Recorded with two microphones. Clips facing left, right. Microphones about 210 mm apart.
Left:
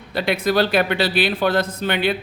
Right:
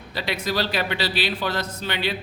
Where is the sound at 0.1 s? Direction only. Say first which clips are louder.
Left 7 dB; 55° left (ahead or behind).